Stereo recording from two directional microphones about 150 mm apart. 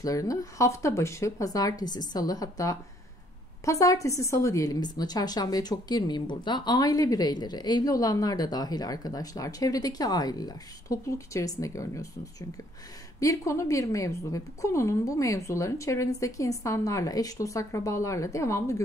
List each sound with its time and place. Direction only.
0.0 s a woman's voice: 20° left (ahead or behind)